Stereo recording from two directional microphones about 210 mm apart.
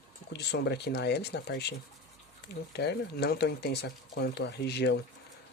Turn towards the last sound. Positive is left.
turn(degrees=50)  # may be behind; listen again after turning